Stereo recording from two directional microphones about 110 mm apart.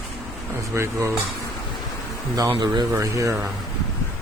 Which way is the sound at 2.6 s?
35° right (ahead or behind).